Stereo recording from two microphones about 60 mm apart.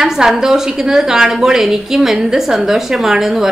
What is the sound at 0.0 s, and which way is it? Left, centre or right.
A woman's voice, centre.